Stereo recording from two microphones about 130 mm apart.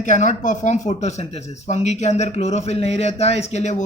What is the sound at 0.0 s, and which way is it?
Speech, 70° left (ahead or behind).